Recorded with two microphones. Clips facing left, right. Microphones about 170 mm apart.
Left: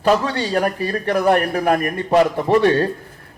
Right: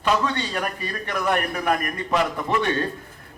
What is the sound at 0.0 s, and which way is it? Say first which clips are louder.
Speech: left 5 dB; 35° left (ahead or behind).